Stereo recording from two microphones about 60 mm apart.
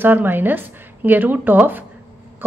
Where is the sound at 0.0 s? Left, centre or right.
Right.